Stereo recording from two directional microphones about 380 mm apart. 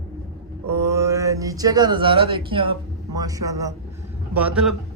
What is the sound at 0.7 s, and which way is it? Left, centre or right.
A man's voice, centre.